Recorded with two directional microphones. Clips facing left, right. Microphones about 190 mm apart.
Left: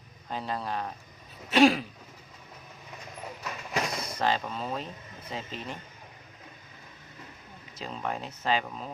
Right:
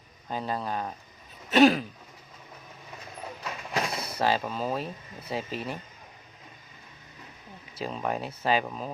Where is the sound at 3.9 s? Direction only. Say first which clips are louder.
Right 1 dB; 10° right (ahead or behind).